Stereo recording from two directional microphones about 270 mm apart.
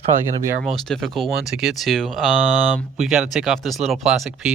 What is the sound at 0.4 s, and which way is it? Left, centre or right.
Speech, centre.